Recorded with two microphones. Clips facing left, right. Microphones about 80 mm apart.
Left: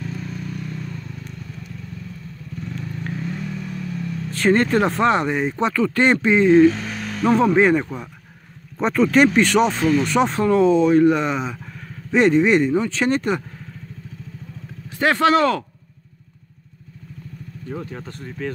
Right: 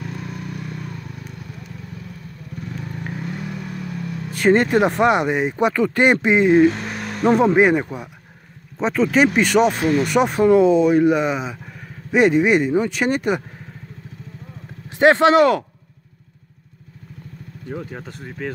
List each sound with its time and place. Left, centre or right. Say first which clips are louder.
0.0 s vehicle: even; right
3.0 s vehicle: left 2 dB; centre
4.3 s speech: right 2 dB; centre
6.9 s a sound: right 1 dB; centre
7.2 s speech: right 1 dB; centre
14.9 s speech: right 4 dB; right
18.0 s speech: even; centre